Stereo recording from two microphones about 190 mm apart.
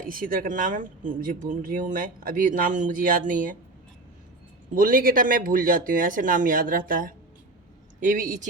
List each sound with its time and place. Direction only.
0.0 s speech: 50° right (ahead or behind)
4.7 s speech: 45° right (ahead or behind)